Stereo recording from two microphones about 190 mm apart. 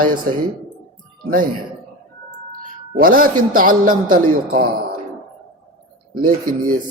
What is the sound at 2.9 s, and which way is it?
A man's voice, 45° right (ahead or behind).